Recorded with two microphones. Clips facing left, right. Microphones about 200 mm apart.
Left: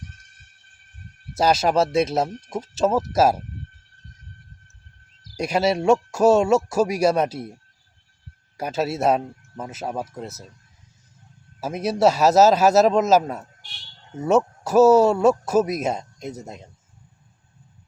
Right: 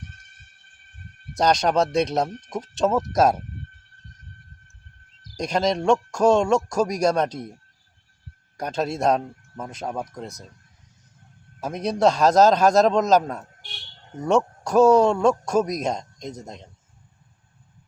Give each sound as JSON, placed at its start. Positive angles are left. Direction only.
{"t": 0.0, "sound": "a sound", "side_deg": -60}
{"t": 1.4, "sound": "speech", "side_deg": 5}
{"t": 5.4, "sound": "speech", "side_deg": 10}
{"t": 11.6, "sound": "speech", "side_deg": 5}